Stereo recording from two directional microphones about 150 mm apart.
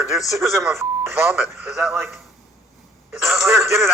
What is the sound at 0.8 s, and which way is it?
Speech, 15° right (ahead or behind).